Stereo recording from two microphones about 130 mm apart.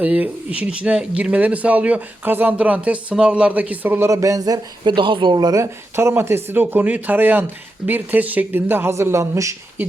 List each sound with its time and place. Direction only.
0.0 s speech: 10° right (ahead or behind); by 5.6 s 30° right (ahead or behind)
6.0 s speech: 20° right (ahead or behind)